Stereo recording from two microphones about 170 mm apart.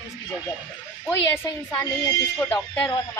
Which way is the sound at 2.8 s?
20° left (ahead or behind).